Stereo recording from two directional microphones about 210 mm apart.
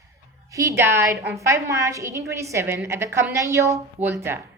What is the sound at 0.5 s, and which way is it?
A woman's voice, 15° right (ahead or behind).